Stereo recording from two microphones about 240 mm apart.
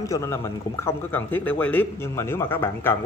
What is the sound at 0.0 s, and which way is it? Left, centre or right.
A man's voice, centre.